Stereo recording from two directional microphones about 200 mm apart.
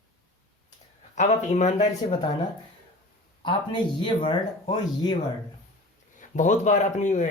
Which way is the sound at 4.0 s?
25° left (ahead or behind).